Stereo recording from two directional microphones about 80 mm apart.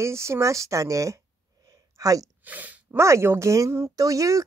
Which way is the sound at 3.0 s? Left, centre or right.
Right.